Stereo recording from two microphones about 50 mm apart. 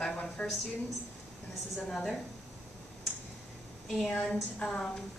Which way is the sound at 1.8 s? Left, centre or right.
Centre.